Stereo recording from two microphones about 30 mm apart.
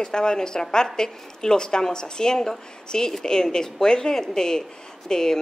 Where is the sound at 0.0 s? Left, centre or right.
Left.